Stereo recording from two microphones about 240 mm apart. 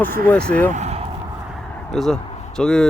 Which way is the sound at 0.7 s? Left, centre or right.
Right.